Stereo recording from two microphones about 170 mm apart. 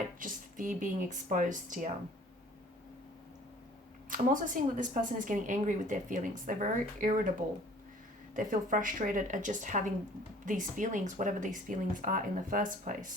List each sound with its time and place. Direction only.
0.2 s speech: 50° right (ahead or behind)
4.1 s speech: 50° right (ahead or behind)